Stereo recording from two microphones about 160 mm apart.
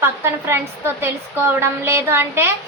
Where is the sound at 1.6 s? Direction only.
15° right (ahead or behind).